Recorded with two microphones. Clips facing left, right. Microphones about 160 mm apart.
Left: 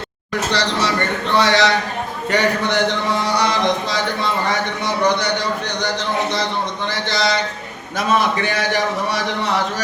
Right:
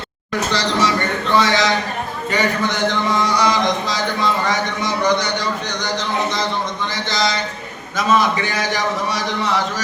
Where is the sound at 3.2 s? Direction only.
60° left (ahead or behind).